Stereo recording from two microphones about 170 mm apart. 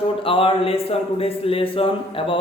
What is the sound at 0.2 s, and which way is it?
A man's voice, 30° left (ahead or behind).